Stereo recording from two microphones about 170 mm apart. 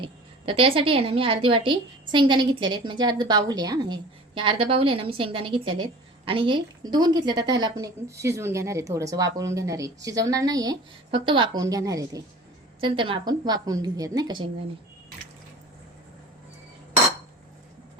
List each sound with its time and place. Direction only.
0.0 s a woman's voice: 30° right (ahead or behind)
12.8 s a woman's voice: 30° right (ahead or behind)